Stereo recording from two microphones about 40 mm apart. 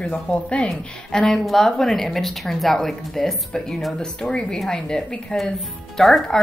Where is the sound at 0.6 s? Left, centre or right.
Centre.